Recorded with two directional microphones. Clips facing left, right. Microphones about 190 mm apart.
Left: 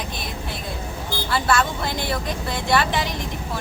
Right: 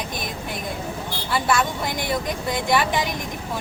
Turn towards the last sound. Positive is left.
turn(degrees=-15)  # may be behind; listen again after turning